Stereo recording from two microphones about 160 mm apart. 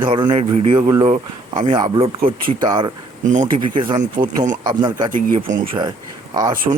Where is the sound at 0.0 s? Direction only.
30° right (ahead or behind).